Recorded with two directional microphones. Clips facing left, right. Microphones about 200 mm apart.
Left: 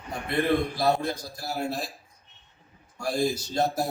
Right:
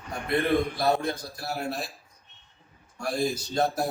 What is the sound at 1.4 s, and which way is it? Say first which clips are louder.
Speech: left 3 dB; 25° left (ahead or behind).